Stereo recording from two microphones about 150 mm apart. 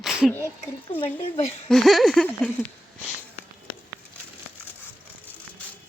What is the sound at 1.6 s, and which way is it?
Speech, centre (ahead or behind).